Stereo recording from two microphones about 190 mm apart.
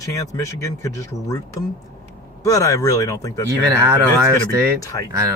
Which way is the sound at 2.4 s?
20° left (ahead or behind).